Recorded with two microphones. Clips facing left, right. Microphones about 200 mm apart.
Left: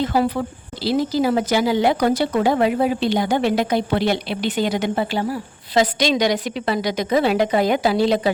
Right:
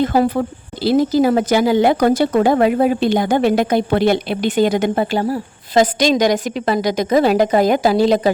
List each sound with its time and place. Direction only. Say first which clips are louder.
0.0 s speech: right 4 dB; 50° right (ahead or behind)